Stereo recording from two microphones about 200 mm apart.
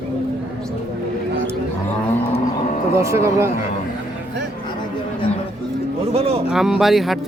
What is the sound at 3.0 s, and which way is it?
Speech, 15° right (ahead or behind).